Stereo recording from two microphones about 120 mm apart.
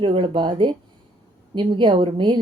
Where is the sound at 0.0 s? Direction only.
45° right (ahead or behind).